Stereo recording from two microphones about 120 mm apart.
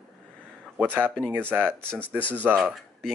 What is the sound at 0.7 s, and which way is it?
Speech, 15° right (ahead or behind).